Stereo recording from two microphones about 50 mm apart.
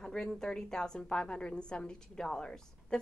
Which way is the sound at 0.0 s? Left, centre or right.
Centre.